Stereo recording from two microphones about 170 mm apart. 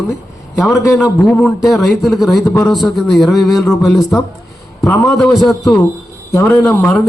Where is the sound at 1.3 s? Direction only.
5° left (ahead or behind).